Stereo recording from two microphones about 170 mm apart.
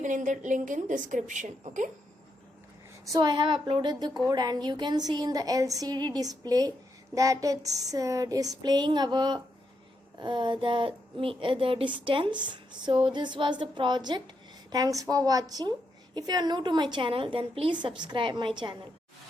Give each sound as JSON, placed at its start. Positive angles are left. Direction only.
{"t": 0.0, "sound": "a woman's voice", "side_deg": -45}
{"t": 3.1, "sound": "speech", "side_deg": -25}